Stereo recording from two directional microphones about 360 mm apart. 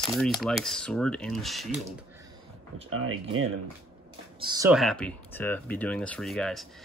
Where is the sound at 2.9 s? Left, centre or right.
Right.